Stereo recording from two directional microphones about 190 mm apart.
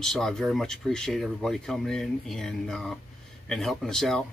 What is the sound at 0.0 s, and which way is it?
Speech, centre (ahead or behind).